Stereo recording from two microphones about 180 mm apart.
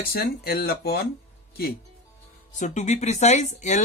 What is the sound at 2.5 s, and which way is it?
Speech, 40° left (ahead or behind).